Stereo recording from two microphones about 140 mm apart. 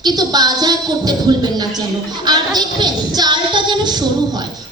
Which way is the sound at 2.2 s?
30° right (ahead or behind).